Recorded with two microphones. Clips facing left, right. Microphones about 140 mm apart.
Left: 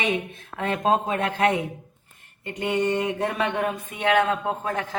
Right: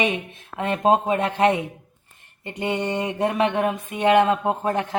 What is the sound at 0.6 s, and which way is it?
Speech, 20° right (ahead or behind).